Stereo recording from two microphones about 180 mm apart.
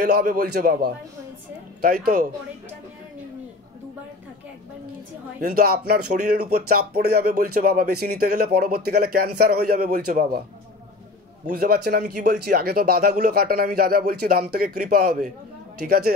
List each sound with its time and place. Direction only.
0.0 s speech: 55° right (ahead or behind)
5.4 s speech: 55° right (ahead or behind)
11.4 s speech: 55° right (ahead or behind)